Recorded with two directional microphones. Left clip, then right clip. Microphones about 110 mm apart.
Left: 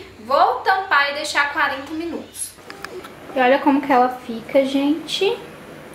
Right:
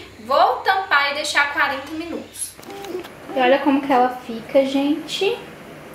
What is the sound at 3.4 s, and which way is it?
Speech, 15° left (ahead or behind).